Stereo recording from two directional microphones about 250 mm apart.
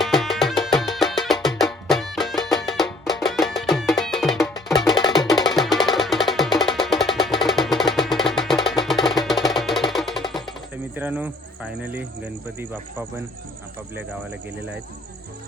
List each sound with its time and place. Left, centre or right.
0.0 s music: centre
10.9 s speech: centre